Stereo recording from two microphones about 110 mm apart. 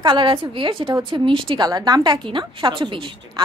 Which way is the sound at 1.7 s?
35° right (ahead or behind).